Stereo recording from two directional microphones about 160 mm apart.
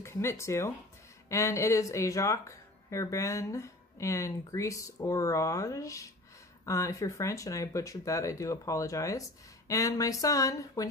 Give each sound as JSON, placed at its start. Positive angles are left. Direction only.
{"t": 0.0, "sound": "speech", "side_deg": 15}